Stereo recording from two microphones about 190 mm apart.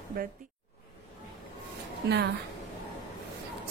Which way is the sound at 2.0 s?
60° right (ahead or behind).